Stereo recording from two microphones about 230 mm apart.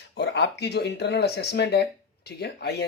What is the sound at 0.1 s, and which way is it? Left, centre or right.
Speech, left.